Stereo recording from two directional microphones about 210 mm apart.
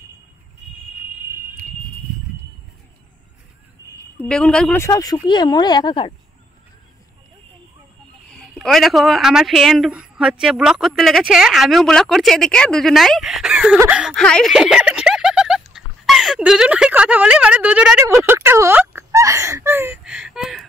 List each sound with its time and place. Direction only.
3.8 s a sound: 15° left (ahead or behind)
4.2 s speech: 5° left (ahead or behind); by 6.1 s 25° left (ahead or behind)
8.3 s speech: centre (ahead or behind)